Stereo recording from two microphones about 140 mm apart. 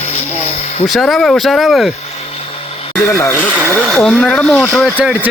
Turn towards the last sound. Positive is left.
turn(degrees=-10)  # may be behind; listen again after turning